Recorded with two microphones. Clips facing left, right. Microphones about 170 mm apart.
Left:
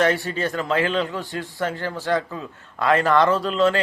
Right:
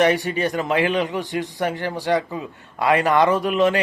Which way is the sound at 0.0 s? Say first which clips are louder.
Right 2 dB; 15° right (ahead or behind).